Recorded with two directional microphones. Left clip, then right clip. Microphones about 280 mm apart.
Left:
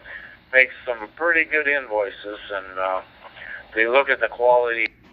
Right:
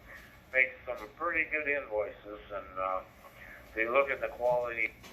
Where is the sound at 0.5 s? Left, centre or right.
Centre.